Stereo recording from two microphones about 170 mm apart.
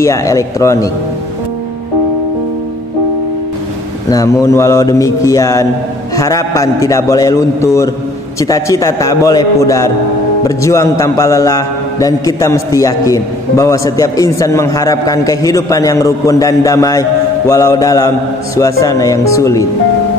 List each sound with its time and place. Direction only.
0.0 s a man's voice: 20° left (ahead or behind)
4.1 s a man's voice: 20° left (ahead or behind)